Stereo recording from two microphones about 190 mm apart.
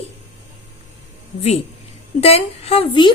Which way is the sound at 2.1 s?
30° left (ahead or behind).